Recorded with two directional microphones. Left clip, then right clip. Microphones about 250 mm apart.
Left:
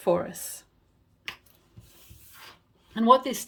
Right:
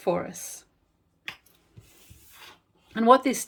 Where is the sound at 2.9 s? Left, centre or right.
Centre.